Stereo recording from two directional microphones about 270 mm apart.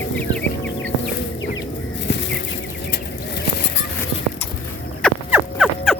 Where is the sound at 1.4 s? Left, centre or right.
Left.